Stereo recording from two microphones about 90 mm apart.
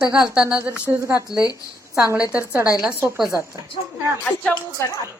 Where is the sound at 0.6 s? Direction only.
25° right (ahead or behind).